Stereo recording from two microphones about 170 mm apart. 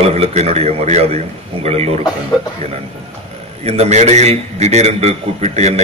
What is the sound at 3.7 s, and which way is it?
A man's voice, 40° right (ahead or behind).